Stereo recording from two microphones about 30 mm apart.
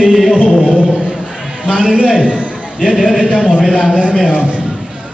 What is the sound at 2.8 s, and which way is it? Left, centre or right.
A man's voice, right.